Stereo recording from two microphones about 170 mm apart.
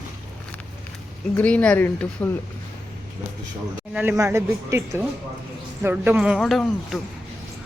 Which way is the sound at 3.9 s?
10° right (ahead or behind).